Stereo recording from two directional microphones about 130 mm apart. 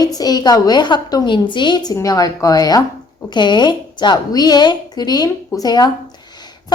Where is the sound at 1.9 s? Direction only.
25° left (ahead or behind).